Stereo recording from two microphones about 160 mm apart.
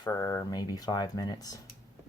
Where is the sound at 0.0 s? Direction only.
20° left (ahead or behind).